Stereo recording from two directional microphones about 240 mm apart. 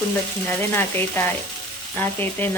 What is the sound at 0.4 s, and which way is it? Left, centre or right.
Speech, centre.